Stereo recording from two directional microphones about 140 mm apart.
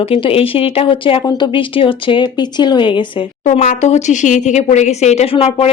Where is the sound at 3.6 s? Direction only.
55° left (ahead or behind).